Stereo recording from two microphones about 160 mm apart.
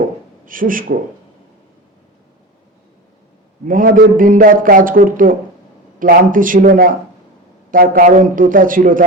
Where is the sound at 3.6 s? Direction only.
60° right (ahead or behind).